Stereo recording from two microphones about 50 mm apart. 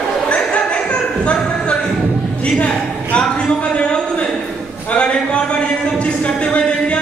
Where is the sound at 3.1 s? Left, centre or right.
Centre.